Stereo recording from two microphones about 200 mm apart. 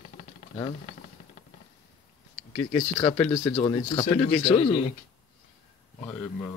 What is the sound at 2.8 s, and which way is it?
Speech, 20° left (ahead or behind).